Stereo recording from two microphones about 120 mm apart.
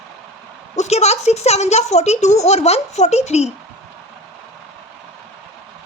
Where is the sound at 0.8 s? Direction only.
65° left (ahead or behind).